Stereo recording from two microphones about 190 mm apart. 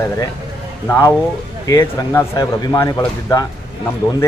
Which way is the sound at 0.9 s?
15° left (ahead or behind).